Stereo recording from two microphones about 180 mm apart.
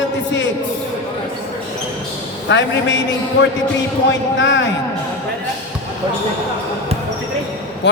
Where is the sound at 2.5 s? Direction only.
80° left.